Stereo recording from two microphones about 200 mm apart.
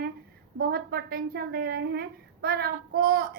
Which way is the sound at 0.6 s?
50° right (ahead or behind).